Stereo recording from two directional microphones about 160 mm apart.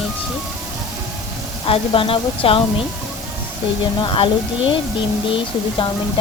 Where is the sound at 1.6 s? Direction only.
35° left (ahead or behind).